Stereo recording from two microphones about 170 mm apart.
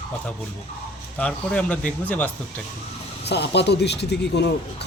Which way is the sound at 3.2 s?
75° left (ahead or behind).